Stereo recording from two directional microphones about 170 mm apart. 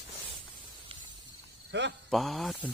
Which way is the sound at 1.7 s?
90° right.